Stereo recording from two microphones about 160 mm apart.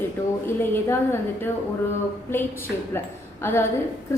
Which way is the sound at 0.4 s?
15° left (ahead or behind).